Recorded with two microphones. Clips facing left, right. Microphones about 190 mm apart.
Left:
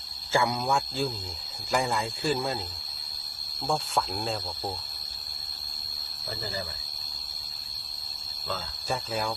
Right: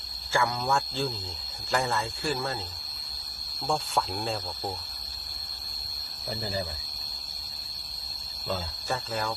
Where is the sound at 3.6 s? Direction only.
Centre (ahead or behind).